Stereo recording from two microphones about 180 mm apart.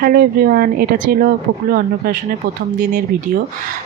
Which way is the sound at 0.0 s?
55° right (ahead or behind).